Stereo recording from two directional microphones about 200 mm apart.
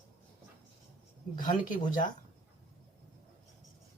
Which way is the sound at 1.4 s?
40° left (ahead or behind).